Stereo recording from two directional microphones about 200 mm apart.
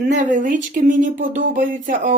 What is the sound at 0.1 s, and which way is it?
Speech, 40° right (ahead or behind).